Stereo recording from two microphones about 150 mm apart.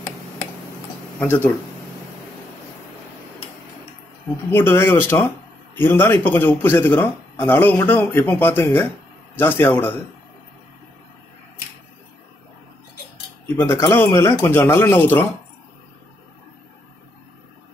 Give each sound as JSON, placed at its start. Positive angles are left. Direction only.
{"t": 1.2, "sound": "a man's voice", "side_deg": 10}
{"t": 4.5, "sound": "a man's voice", "side_deg": 15}
{"t": 13.6, "sound": "a man's voice", "side_deg": 15}